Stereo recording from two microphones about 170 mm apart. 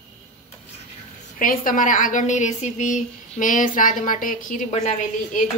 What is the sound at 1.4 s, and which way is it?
A woman's voice, 55° left (ahead or behind).